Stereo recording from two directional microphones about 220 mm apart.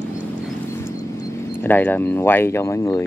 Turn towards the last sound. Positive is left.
turn(degrees=15)  # may be behind; listen again after turning